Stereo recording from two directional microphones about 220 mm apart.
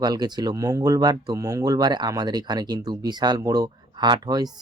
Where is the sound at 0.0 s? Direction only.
20° right (ahead or behind).